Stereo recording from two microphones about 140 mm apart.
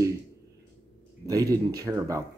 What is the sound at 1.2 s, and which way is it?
Speech, 25° right (ahead or behind).